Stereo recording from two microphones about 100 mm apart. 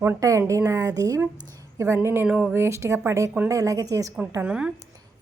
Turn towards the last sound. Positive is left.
turn(degrees=-10)  # may be behind; listen again after turning